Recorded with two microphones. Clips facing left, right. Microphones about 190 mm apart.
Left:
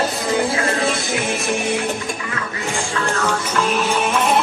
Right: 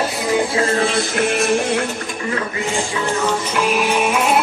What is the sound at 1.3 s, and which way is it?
Music, 60° right (ahead or behind).